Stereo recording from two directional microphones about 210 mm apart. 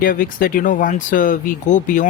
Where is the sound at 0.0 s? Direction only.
40° left (ahead or behind).